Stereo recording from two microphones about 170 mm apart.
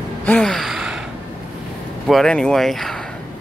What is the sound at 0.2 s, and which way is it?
Gasp, 5° left (ahead or behind).